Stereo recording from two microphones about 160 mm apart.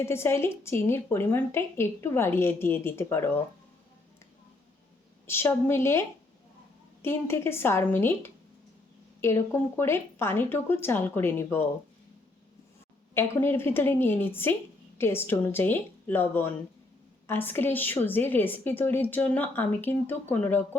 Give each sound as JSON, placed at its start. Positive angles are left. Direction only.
{"t": 0.0, "sound": "a woman's voice", "side_deg": 15}
{"t": 5.2, "sound": "a woman's voice", "side_deg": 15}
{"t": 13.1, "sound": "a woman's voice", "side_deg": 15}